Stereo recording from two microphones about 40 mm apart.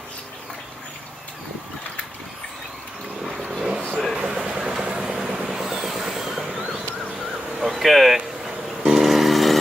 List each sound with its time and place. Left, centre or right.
3.5 s vehicle: centre
5.5 s train: centre
7.6 s a sound: centre
8.9 s vehicle: centre